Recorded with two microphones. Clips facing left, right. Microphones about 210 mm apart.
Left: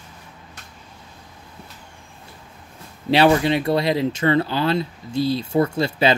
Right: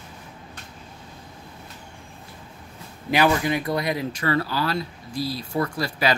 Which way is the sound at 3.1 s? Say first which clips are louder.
Left 5 dB; 25° left (ahead or behind).